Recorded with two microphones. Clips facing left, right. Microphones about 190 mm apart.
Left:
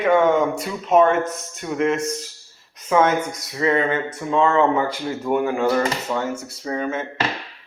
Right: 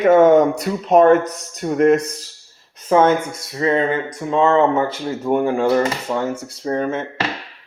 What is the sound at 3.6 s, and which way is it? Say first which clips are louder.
A man's voice: right 2 dB; 25° right (ahead or behind).